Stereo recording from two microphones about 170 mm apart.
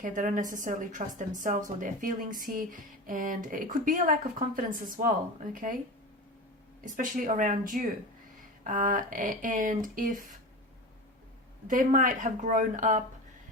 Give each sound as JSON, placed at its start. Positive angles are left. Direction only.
{"t": 0.0, "sound": "speech", "side_deg": -50}
{"t": 6.8, "sound": "speech", "side_deg": -50}
{"t": 11.7, "sound": "speech", "side_deg": -50}